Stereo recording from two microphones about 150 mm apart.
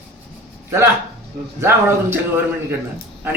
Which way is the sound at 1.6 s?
15° right (ahead or behind).